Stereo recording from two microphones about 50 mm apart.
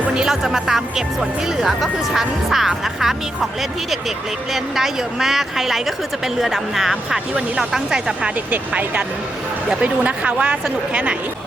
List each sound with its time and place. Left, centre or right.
0.1 s speech: centre
4.5 s speech: centre
8.4 s a woman's voice: right